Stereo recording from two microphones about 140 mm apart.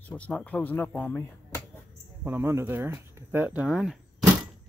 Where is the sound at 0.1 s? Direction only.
10° left (ahead or behind).